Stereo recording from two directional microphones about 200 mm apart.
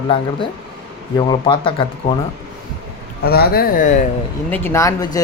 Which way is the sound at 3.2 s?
50° left (ahead or behind).